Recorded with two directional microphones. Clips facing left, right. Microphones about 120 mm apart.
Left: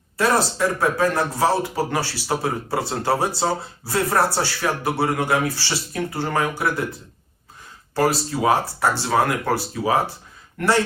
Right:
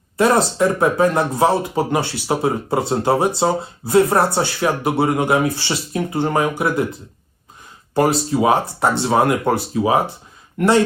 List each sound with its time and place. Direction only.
0.2 s speech: 20° right (ahead or behind)
7.9 s speech: 20° right (ahead or behind)